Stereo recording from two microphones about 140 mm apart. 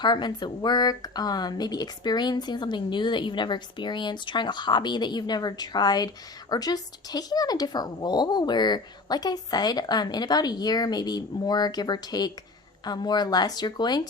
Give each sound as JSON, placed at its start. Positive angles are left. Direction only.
{"t": 0.0, "sound": "speech", "side_deg": 30}